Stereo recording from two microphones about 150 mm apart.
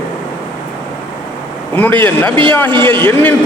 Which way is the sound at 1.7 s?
10° left (ahead or behind).